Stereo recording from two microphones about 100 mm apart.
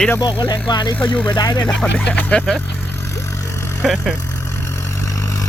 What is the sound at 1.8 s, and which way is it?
Speech, 15° left (ahead or behind).